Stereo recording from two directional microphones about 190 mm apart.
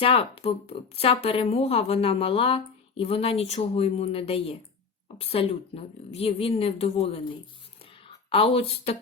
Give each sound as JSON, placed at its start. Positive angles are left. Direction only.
{"t": 0.0, "sound": "a woman's voice", "side_deg": 30}
{"t": 8.3, "sound": "a woman's voice", "side_deg": 30}